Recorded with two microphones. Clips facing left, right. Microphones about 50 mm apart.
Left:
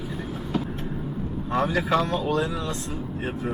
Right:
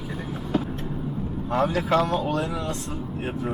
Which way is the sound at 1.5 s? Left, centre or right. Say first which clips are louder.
Right 1 dB; centre.